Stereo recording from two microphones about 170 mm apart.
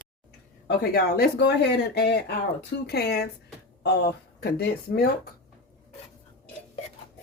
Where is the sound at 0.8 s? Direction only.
70° left (ahead or behind).